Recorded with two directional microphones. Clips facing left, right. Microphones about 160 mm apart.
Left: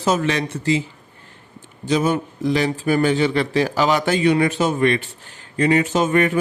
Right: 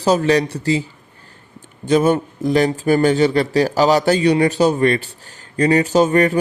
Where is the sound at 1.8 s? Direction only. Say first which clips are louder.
Right 4 dB; 50° right (ahead or behind).